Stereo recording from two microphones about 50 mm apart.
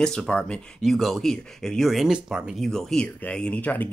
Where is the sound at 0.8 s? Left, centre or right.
Centre.